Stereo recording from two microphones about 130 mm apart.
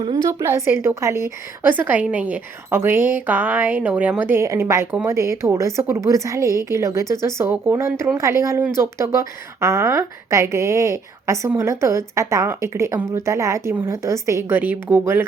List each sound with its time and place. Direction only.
0.0 s a woman's voice: 30° right (ahead or behind)